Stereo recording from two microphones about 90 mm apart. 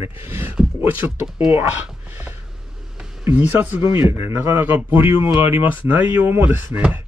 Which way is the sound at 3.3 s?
20° right (ahead or behind).